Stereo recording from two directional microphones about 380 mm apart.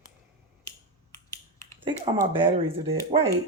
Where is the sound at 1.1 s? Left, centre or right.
Centre.